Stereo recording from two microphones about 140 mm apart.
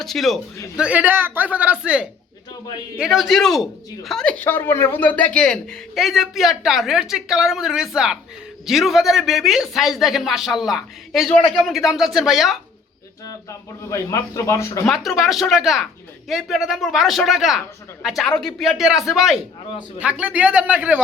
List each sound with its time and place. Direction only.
0.0 s a man's voice: centre (ahead or behind)
0.8 s a man's voice: 10° right (ahead or behind)
13.2 s speech: 20° left (ahead or behind)
14.8 s a man's voice: centre (ahead or behind)